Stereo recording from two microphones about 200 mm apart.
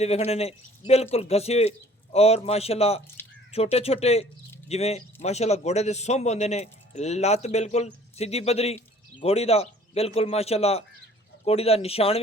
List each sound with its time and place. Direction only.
0.0 s a man's voice: 30° left (ahead or behind)